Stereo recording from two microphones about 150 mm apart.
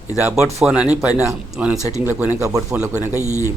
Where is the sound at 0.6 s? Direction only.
5° right (ahead or behind).